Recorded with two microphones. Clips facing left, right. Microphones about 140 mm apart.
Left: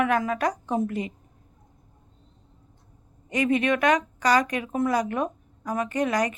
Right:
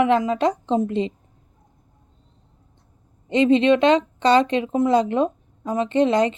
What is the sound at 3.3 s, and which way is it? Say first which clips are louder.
A woman's voice: right 7 dB; 25° right (ahead or behind).